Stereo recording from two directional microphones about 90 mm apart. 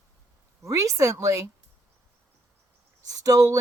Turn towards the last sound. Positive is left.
turn(degrees=-40)  # may be behind; listen again after turning